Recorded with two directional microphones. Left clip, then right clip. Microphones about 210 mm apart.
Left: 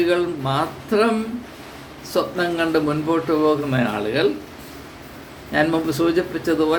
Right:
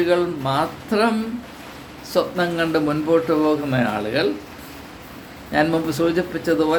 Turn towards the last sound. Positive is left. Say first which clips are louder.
# even
turn(degrees=-5)  # may be behind; listen again after turning